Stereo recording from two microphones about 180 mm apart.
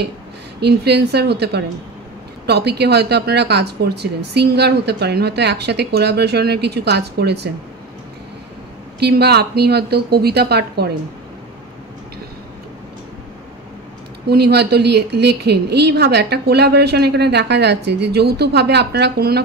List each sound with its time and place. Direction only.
0.6 s a woman's voice: 65° right (ahead or behind)
9.0 s speech: 65° right (ahead or behind)
14.2 s a woman's voice: 65° right (ahead or behind)